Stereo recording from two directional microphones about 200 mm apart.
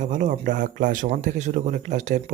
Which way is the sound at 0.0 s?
40° right (ahead or behind).